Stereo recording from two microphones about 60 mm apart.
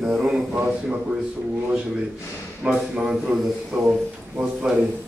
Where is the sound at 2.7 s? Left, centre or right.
Centre.